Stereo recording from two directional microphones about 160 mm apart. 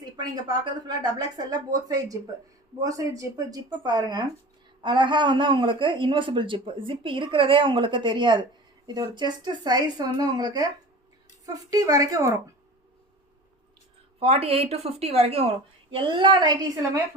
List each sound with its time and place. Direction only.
0.0 s a man's voice: 25° right (ahead or behind)
14.2 s a man's voice: 40° right (ahead or behind)